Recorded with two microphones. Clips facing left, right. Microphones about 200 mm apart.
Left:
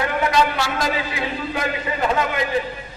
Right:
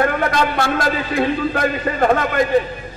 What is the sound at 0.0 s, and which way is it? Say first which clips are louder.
A man's voice: right 2 dB; 55° right (ahead or behind).